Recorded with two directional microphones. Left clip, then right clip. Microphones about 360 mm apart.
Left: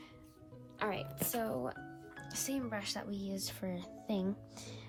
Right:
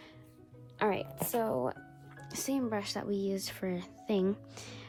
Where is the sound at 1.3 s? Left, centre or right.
Right.